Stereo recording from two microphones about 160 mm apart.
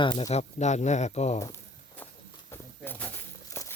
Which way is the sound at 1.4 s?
15° left (ahead or behind).